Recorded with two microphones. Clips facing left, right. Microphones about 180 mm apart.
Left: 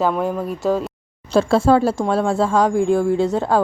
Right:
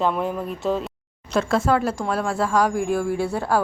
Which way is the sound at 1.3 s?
30° left (ahead or behind).